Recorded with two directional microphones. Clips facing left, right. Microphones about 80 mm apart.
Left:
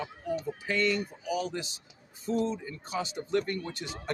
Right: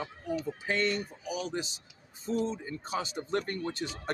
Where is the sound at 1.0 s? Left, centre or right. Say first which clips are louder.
Left 4 dB; left.